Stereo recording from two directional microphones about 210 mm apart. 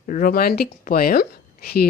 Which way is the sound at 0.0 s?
45° left (ahead or behind).